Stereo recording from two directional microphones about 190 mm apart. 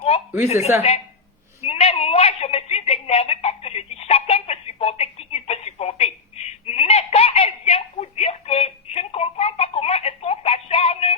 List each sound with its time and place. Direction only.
0.8 s a woman's voice: 30° left (ahead or behind)
1.6 s telephone: 35° left (ahead or behind)